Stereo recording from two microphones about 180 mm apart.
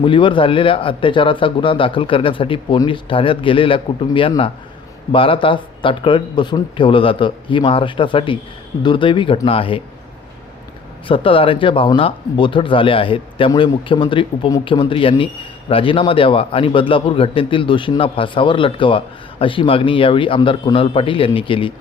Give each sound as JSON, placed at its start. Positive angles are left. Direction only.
{"t": 0.0, "sound": "a man's voice", "side_deg": 25}
{"t": 11.1, "sound": "a man's voice", "side_deg": 30}